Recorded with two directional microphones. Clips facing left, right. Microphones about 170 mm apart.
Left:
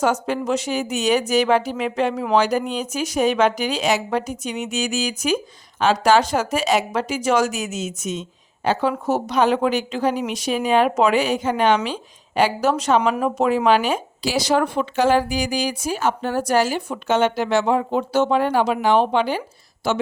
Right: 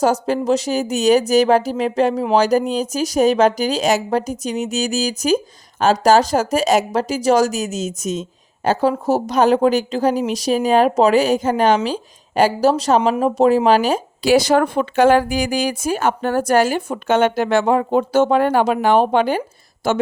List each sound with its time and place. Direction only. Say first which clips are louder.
0.0 s speech: right 4 dB; 35° right (ahead or behind)
14.2 s speech: right 7 dB; 55° right (ahead or behind)